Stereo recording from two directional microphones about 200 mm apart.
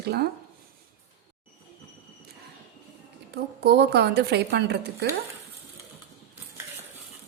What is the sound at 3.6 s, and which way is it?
Speech, 55° right (ahead or behind).